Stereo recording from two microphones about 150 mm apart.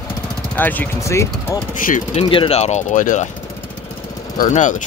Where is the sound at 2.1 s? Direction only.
35° left (ahead or behind); by 3.3 s 55° left (ahead or behind).